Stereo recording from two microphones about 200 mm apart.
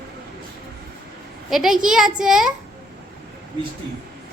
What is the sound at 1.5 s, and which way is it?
A woman's voice, centre (ahead or behind).